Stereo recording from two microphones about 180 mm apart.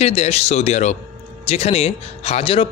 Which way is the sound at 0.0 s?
35° left (ahead or behind).